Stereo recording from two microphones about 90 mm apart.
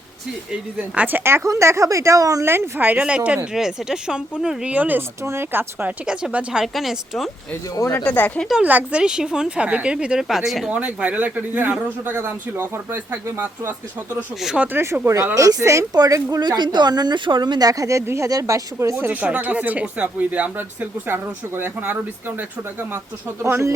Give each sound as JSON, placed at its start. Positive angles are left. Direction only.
{"t": 0.5, "sound": "speech", "side_deg": -15}
{"t": 2.5, "sound": "speech", "side_deg": -25}
{"t": 6.1, "sound": "speech", "side_deg": -10}
{"t": 7.9, "sound": "speech", "side_deg": 20}
{"t": 8.6, "sound": "speech", "side_deg": -15}
{"t": 10.7, "sound": "speech", "side_deg": -15}
{"t": 14.4, "sound": "speech", "side_deg": -10}
{"t": 14.7, "sound": "speech", "side_deg": -30}